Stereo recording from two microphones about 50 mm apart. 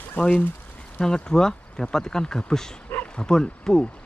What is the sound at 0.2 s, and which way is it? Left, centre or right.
Speech, left.